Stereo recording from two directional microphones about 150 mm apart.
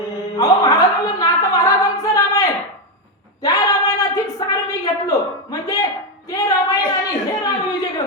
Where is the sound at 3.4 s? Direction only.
25° left (ahead or behind).